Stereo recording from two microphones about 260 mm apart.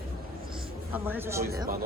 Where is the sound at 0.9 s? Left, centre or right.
Centre.